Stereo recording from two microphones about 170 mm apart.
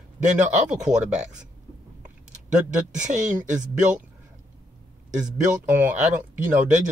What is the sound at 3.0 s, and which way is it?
Speech, 45° right (ahead or behind).